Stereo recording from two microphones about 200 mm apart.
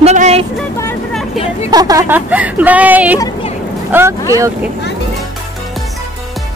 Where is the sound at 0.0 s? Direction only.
35° right (ahead or behind).